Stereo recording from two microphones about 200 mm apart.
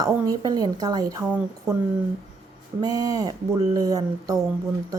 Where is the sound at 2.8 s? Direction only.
20° right (ahead or behind).